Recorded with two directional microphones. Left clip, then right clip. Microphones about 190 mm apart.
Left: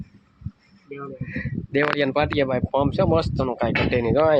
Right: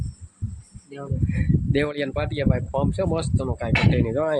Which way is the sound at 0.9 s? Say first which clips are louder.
Even; centre (ahead or behind).